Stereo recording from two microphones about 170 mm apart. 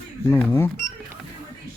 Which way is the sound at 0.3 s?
10° left (ahead or behind).